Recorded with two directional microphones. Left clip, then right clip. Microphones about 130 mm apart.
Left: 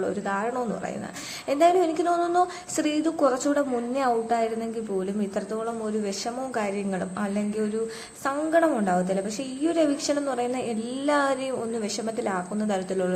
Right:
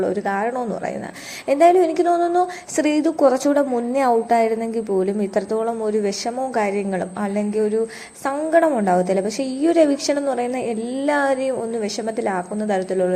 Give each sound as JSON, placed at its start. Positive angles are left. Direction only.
{"t": 0.0, "sound": "a woman's voice", "side_deg": -30}